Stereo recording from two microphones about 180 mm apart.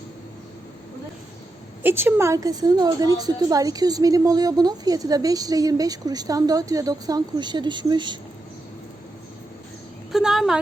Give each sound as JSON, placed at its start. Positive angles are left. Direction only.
{"t": 1.8, "sound": "a woman's voice", "side_deg": -10}
{"t": 10.1, "sound": "a woman's voice", "side_deg": 0}